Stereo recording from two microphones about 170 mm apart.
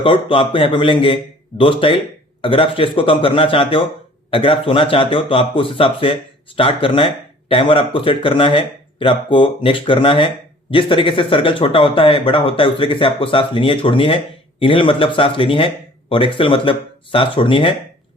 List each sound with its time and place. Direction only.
0.0 s speech: 30° left (ahead or behind)